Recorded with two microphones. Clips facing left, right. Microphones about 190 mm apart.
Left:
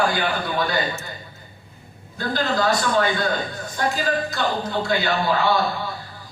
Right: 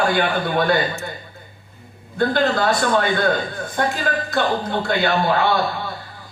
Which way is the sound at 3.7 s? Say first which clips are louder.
Right 1 dB; 60° right (ahead or behind).